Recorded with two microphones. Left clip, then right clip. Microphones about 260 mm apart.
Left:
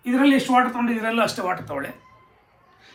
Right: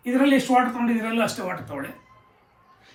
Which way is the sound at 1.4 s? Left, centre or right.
Centre.